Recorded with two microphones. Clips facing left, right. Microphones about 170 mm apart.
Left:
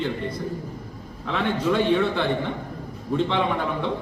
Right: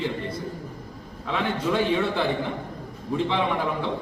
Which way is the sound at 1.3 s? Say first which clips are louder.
Left 2 dB; centre (ahead or behind).